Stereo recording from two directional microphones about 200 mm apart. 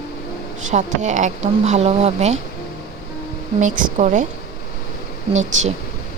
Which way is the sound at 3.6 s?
40° right (ahead or behind).